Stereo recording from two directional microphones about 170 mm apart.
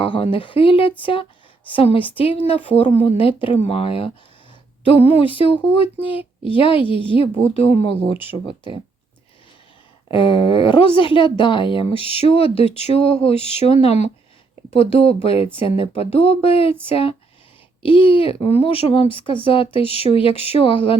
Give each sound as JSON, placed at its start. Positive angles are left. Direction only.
{"t": 0.0, "sound": "speech", "side_deg": 30}
{"t": 10.1, "sound": "speech", "side_deg": 30}